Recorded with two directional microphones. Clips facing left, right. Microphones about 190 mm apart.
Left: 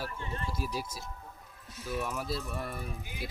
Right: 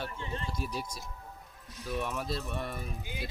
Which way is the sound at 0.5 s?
Centre (ahead or behind).